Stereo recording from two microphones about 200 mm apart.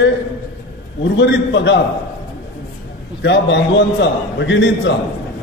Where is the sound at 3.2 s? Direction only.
60° left (ahead or behind).